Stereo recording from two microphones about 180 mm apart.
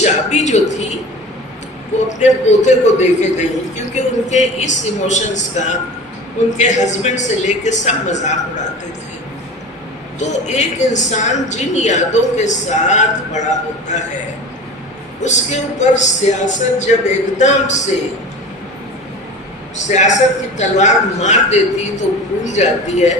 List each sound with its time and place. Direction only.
0.0 s a woman's voice: 40° left (ahead or behind)
2.1 s a woman's voice: 40° left (ahead or behind)
10.2 s a woman's voice: 40° left (ahead or behind)
15.2 s a woman's voice: 40° left (ahead or behind)
19.7 s a woman's voice: 40° left (ahead or behind)